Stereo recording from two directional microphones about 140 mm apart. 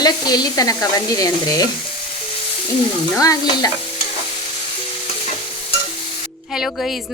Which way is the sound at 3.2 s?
25° left (ahead or behind).